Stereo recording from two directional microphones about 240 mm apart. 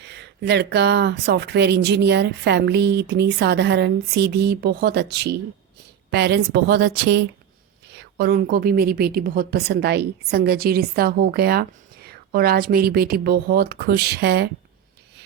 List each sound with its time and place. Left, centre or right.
0.0 s speech: right